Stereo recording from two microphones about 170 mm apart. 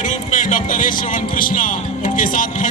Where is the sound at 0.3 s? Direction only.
50° left (ahead or behind).